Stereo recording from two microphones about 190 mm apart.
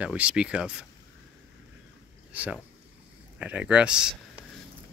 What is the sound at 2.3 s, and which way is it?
Speech, 5° right (ahead or behind).